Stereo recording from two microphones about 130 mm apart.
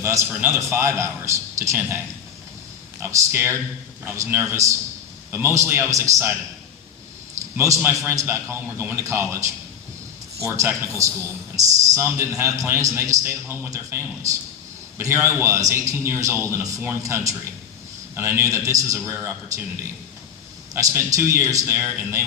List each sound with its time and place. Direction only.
0.3 s a man's voice: 20° right (ahead or behind)
7.5 s a man's voice: 20° right (ahead or behind)
20.7 s a man's voice: 20° right (ahead or behind)